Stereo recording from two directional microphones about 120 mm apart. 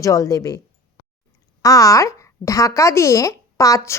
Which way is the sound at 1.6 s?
30° left (ahead or behind).